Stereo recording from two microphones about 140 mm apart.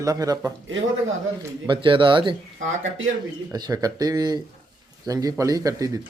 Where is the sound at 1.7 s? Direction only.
35° right (ahead or behind).